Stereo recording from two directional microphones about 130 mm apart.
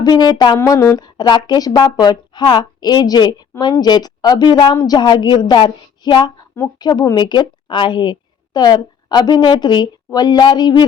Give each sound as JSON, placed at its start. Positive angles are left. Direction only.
{"t": 0.0, "sound": "a woman's voice", "side_deg": 30}